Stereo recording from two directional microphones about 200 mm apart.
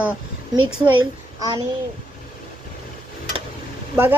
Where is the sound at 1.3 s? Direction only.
20° right (ahead or behind).